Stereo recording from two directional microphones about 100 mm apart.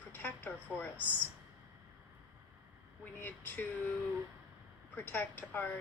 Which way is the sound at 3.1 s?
20° left (ahead or behind).